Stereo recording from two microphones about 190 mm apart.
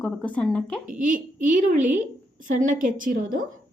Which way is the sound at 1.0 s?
45° right (ahead or behind).